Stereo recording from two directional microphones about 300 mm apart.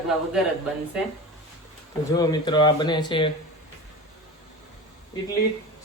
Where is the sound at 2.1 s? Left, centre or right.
Centre.